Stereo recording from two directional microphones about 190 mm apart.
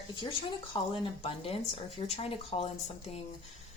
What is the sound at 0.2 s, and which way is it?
Speech, 30° left (ahead or behind).